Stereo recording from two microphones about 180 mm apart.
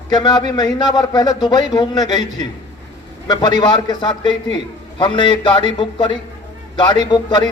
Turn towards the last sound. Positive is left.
turn(degrees=25)  # may be behind; listen again after turning